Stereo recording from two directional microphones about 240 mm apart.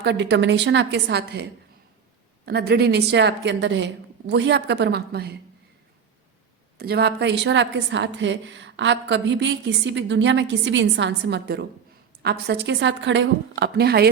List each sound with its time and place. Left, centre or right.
0.0 s a woman's voice: right
2.5 s a woman's voice: right
6.7 s a woman's voice: right